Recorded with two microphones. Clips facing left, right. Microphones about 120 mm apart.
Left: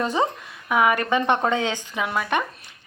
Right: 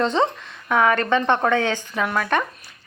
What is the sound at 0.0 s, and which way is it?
A woman's voice, 10° left (ahead or behind).